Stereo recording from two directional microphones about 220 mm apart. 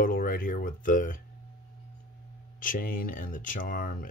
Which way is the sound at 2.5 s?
40° left (ahead or behind).